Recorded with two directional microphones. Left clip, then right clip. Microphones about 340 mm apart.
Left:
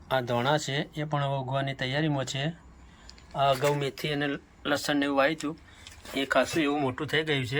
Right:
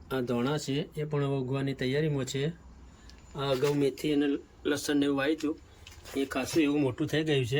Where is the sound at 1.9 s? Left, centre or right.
Left.